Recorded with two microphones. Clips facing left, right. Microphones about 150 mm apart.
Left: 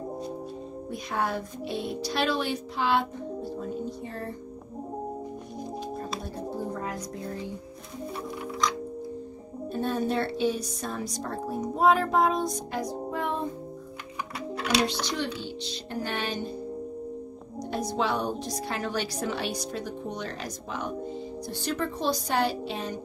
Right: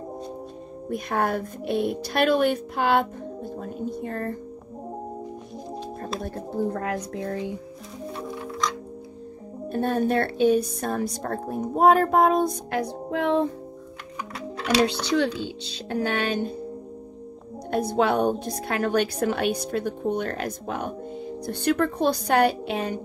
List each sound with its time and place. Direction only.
0.8 s a woman's voice: 55° right (ahead or behind)
6.2 s speech: 60° right (ahead or behind); by 7.5 s 90° right
9.7 s a woman's voice: 55° right (ahead or behind); by 13.5 s 80° right
16.1 s a woman's voice: 55° right (ahead or behind)
17.6 s a woman's voice: 55° right (ahead or behind)